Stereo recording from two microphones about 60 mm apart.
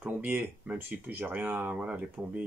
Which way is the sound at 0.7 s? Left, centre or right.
Right.